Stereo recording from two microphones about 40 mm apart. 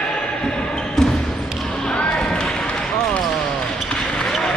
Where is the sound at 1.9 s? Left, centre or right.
Left.